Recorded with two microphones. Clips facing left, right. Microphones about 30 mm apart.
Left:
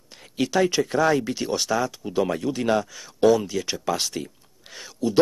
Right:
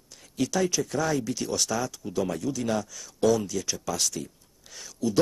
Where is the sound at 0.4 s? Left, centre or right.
Left.